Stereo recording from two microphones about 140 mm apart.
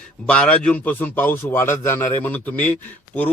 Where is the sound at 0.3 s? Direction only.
10° left (ahead or behind).